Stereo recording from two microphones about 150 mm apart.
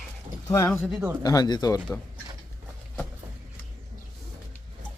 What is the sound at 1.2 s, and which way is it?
Speech, 25° left (ahead or behind).